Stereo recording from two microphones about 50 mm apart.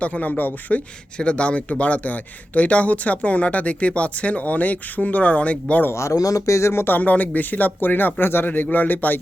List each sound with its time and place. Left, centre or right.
0.0 s speech: left
1.2 s speech: left
5.9 s speech: left
6.8 s speech: left